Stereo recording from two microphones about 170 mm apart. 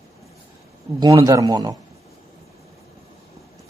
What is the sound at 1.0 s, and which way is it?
Speech, 20° right (ahead or behind).